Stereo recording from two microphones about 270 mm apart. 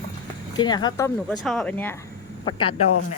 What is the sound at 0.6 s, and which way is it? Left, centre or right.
Speech, centre.